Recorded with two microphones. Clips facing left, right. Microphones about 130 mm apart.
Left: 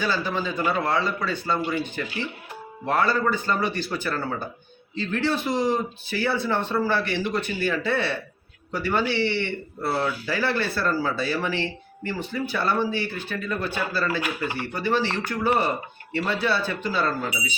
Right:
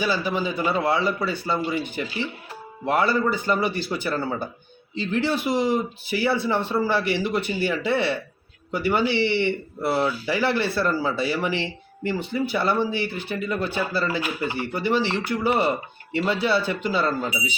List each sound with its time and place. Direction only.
0.0 s a man's voice: 15° right (ahead or behind)